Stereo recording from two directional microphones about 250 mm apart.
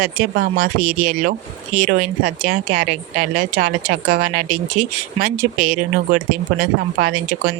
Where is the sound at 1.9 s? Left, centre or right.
Right.